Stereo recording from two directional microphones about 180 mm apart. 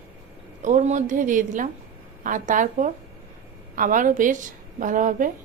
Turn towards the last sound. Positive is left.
turn(degrees=-45)  # may be behind; listen again after turning